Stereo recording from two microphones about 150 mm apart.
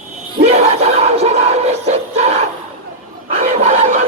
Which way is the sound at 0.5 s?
45° right (ahead or behind).